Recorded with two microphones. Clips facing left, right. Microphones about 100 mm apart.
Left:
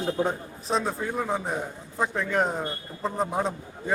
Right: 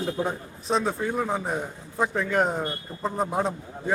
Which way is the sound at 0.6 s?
Centre (ahead or behind).